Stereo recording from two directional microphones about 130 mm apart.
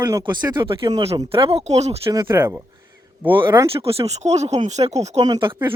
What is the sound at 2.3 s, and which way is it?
Speech, 15° right (ahead or behind).